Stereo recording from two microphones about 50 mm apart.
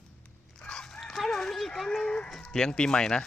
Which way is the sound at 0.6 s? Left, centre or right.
Centre.